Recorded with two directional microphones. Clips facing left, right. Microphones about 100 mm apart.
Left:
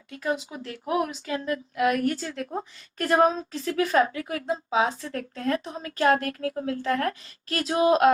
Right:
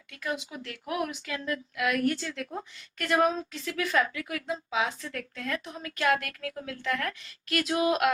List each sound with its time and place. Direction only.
0.1 s a woman's voice: 30° left (ahead or behind)